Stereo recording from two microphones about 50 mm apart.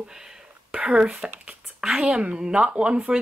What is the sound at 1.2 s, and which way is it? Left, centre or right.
A woman's voice, centre.